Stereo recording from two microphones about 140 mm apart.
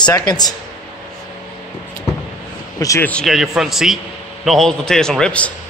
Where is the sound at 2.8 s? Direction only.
25° left (ahead or behind).